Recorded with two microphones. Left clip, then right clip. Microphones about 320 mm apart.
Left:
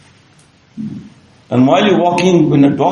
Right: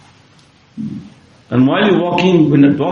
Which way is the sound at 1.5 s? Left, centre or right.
Centre.